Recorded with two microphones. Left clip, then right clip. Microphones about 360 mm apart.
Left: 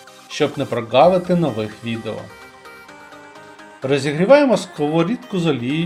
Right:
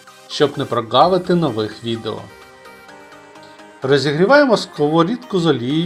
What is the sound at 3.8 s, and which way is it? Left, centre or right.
Speech, centre.